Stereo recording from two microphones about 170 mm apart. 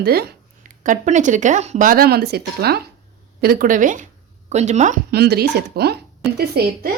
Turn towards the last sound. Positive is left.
turn(degrees=-70)  # may be behind; listen again after turning